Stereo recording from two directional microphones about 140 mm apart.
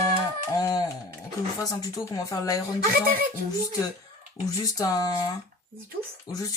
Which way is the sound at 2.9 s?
90° right.